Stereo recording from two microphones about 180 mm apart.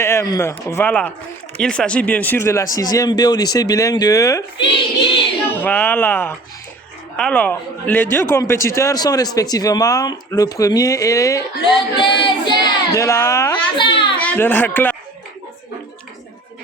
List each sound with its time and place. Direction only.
0.0 s a man's voice: 15° left (ahead or behind)
5.6 s a man's voice: 10° left (ahead or behind)
13.7 s a sound: 30° left (ahead or behind)
14.2 s speech: 10° left (ahead or behind)